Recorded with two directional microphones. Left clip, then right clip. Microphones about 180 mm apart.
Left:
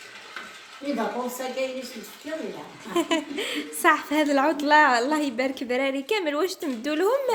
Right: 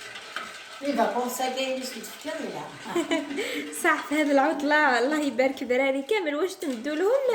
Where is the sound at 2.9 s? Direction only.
30° left (ahead or behind).